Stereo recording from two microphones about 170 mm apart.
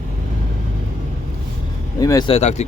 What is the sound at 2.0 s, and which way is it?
Speech, 20° left (ahead or behind).